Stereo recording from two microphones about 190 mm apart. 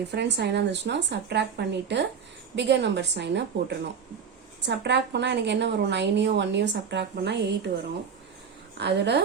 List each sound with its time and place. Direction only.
0.1 s a woman's voice: 65° right (ahead or behind)
8.8 s a woman's voice: 60° right (ahead or behind)